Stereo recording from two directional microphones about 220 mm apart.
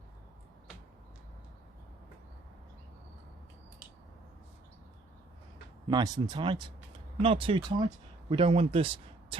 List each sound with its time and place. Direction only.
5.9 s speech: 15° right (ahead or behind)